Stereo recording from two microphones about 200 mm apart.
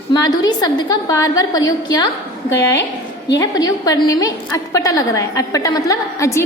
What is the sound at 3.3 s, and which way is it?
A woman's voice, 20° left (ahead or behind).